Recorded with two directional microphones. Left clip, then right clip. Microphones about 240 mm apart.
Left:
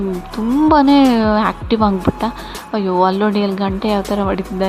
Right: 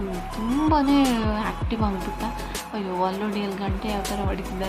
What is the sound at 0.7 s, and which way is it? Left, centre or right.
Speech, left.